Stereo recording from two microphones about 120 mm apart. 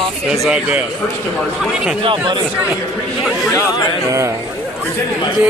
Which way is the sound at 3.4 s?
25° left (ahead or behind).